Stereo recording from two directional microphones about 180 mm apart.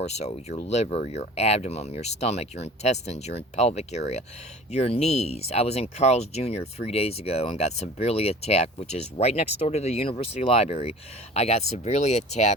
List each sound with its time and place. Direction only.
0.0 s speech: 35° left (ahead or behind)